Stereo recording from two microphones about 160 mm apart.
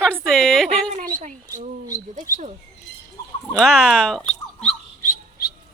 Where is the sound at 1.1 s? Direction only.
55° right (ahead or behind).